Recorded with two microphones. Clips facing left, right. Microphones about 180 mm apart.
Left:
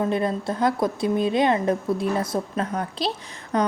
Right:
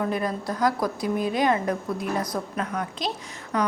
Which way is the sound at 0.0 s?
25° left (ahead or behind).